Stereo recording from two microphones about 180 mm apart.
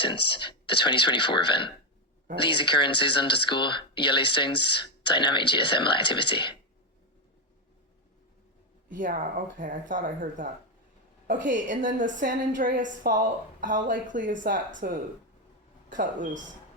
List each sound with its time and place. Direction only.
0.3 s speech: 25° left (ahead or behind)
8.9 s speech: 45° right (ahead or behind)